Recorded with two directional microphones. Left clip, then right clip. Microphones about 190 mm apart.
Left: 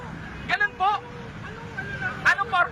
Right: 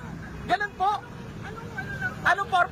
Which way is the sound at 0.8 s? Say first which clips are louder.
Left 2 dB; 35° right (ahead or behind).